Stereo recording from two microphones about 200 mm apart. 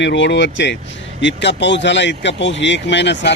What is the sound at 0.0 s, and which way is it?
Speech, 60° left (ahead or behind).